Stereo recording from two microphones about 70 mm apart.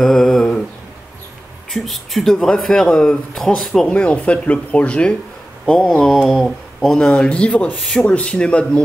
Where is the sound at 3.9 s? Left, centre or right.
Centre.